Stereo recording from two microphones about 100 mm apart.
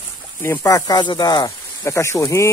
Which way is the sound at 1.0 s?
45° left (ahead or behind).